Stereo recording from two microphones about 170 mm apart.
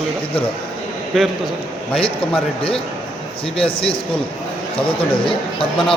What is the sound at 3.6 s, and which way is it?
Speech, 30° left (ahead or behind).